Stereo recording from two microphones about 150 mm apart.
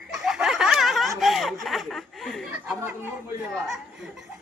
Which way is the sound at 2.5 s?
15° right (ahead or behind).